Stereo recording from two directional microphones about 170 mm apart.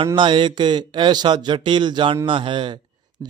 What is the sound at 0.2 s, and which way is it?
A man's voice, 30° right (ahead or behind).